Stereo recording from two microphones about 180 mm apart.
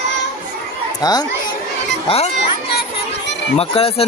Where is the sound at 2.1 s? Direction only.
35° left (ahead or behind).